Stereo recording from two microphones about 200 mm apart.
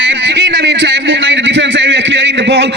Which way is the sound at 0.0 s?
65° right (ahead or behind).